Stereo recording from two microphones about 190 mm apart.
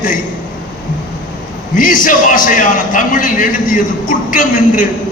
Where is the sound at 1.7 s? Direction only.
45° left (ahead or behind).